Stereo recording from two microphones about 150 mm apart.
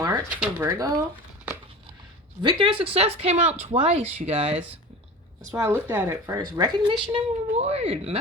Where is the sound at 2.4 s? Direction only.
35° right (ahead or behind).